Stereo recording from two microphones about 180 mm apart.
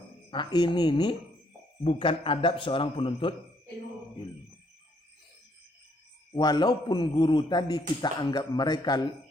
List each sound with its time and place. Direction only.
0.3 s a man's voice: 25° left (ahead or behind)
6.3 s a man's voice: 25° left (ahead or behind)